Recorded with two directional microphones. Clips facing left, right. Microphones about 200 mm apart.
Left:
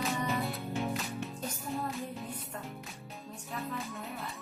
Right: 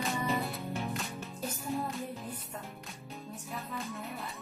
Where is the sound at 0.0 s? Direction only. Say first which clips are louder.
Even; centre (ahead or behind).